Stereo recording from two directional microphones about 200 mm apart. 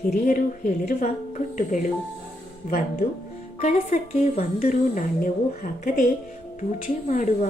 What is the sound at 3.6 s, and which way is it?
Speech, 35° left (ahead or behind).